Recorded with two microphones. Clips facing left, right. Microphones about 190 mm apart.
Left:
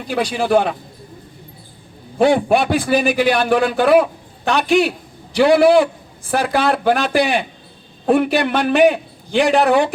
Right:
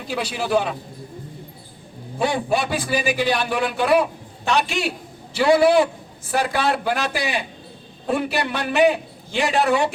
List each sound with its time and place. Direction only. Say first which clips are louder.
0.3 s a man's voice: left 5 dB; 90° left
2.1 s a man's voice: left 8 dB; 65° left (ahead or behind); by 3.8 s 90° left
4.4 s a man's voice: left 6 dB; 55° left (ahead or behind)
6.3 s a man's voice: left 4 dB; 85° left
8.0 s a man's voice: left 7 dB; 65° left (ahead or behind)